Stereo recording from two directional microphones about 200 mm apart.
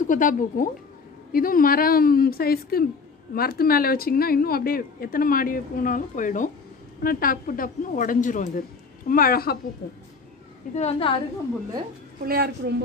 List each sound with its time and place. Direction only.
0.0 s a woman's voice: 40° left (ahead or behind)
10.7 s a woman's voice: 30° left (ahead or behind)
12.3 s a woman's voice: 50° right (ahead or behind)